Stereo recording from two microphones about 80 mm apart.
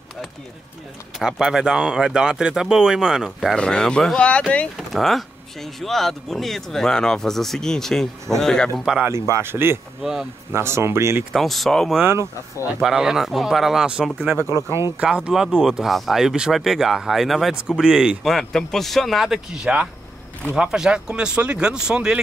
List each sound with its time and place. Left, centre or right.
1.2 s speech: centre
3.5 s speech: centre
4.7 s speech: centre
8.7 s speech: centre
9.0 s speech: right
11.3 s speech: centre
12.0 s speech: right
12.8 s speech: centre
14.2 s speech: right
15.0 s speech: centre
18.2 s speech: centre